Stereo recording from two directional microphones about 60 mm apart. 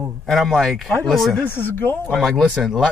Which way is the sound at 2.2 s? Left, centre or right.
Centre.